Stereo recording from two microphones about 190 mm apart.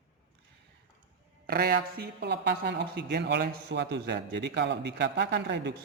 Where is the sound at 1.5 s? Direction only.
55° right (ahead or behind).